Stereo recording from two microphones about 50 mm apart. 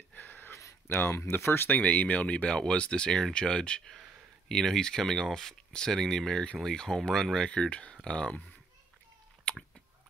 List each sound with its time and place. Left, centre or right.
0.1 s a sound: left
1.1 s speech: left
1.7 s speech: left; by 7.5 s centre
7.5 s speech: left